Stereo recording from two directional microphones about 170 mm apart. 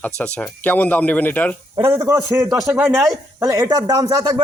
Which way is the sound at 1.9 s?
15° right (ahead or behind).